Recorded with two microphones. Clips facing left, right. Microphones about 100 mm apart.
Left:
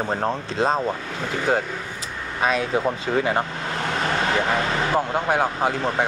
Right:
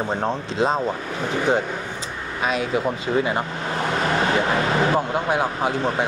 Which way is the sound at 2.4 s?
35° left (ahead or behind).